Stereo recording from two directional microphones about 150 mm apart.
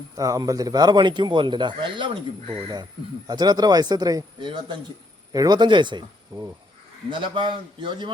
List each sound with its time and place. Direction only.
0.2 s speech: 25° right (ahead or behind)
3.2 s speech: 25° right (ahead or behind)